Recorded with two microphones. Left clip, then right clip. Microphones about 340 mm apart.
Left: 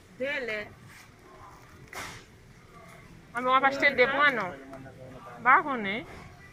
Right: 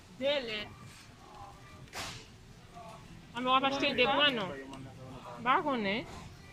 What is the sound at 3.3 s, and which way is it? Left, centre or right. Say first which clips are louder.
Speech: left 4 dB; centre.